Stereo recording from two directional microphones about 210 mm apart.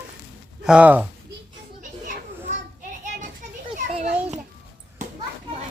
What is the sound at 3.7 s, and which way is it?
Children playing, 35° right (ahead or behind).